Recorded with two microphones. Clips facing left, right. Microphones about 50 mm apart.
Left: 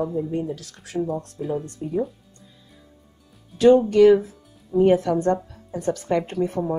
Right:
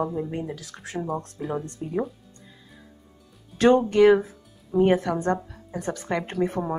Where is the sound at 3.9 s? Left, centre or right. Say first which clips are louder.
Left 3 dB; right.